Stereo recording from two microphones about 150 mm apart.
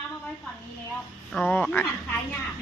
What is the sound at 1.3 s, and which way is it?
Speech, 5° left (ahead or behind).